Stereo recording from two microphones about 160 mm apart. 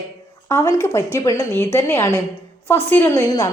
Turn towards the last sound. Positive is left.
turn(degrees=20)  # may be behind; listen again after turning